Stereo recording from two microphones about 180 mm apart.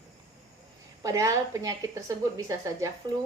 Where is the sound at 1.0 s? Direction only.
15° right (ahead or behind).